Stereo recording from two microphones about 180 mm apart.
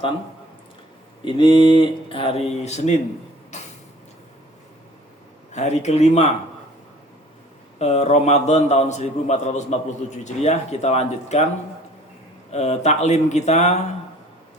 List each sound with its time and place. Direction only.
1.2 s speech: 25° left (ahead or behind)
3.5 s a sound: 40° left (ahead or behind)
5.5 s a man's voice: 40° left (ahead or behind)
7.8 s a man's voice: 35° left (ahead or behind)
12.5 s a man's voice: 35° left (ahead or behind)